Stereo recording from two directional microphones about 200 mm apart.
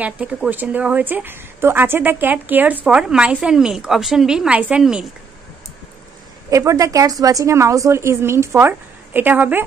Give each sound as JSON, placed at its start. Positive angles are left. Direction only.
{"t": 0.0, "sound": "speech", "side_deg": -5}
{"t": 6.5, "sound": "speech", "side_deg": -15}